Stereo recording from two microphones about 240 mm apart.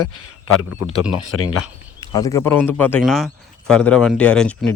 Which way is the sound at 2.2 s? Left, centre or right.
Centre.